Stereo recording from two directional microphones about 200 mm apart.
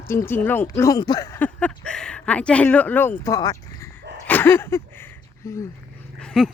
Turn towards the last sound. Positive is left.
turn(degrees=5)  # may be behind; listen again after turning